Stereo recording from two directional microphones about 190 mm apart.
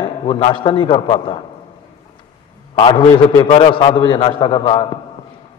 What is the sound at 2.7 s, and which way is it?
A man's voice, 25° left (ahead or behind).